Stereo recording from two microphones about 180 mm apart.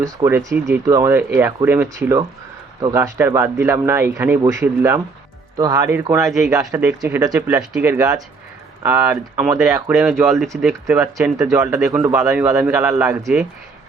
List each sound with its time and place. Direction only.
0.0 s speech: 15° right (ahead or behind)
7.3 s speech: 10° right (ahead or behind)
11.9 s speech: 5° right (ahead or behind)